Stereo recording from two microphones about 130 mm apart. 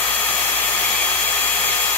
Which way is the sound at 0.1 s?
15° left (ahead or behind).